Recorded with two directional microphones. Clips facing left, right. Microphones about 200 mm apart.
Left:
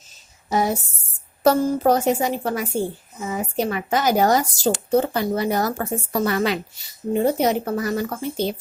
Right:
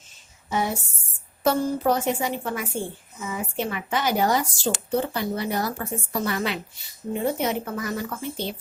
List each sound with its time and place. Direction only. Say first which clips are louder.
0.5 s a woman's voice: left 5 dB; 40° left (ahead or behind)